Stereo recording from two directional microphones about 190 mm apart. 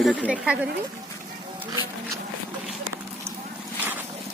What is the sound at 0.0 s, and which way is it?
Speech, 5° right (ahead or behind).